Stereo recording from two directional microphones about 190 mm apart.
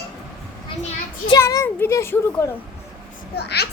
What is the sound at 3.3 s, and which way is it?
Speech, 60° left (ahead or behind).